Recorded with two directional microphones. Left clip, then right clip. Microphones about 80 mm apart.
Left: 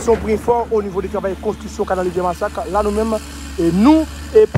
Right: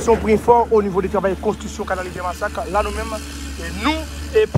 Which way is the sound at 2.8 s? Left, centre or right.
Left.